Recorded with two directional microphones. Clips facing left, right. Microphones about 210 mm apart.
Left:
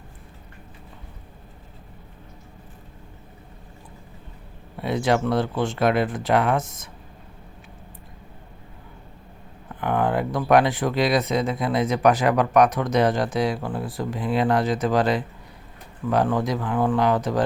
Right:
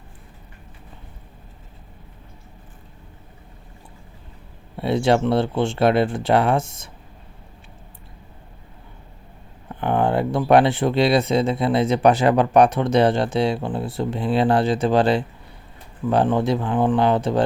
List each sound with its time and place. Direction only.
4.8 s speech: 30° right (ahead or behind)
9.8 s speech: 30° right (ahead or behind)